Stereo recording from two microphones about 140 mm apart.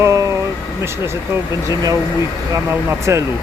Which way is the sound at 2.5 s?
20° right (ahead or behind).